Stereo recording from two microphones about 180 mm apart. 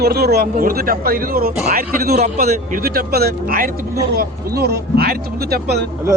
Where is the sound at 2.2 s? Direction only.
40° right (ahead or behind).